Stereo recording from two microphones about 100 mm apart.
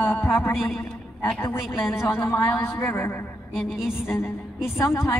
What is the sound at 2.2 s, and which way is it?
Speech, 35° left (ahead or behind).